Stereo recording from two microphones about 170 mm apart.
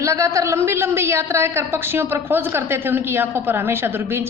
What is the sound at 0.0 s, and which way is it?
A woman's voice, 15° right (ahead or behind).